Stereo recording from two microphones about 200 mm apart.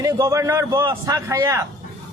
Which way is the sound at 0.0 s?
15° right (ahead or behind).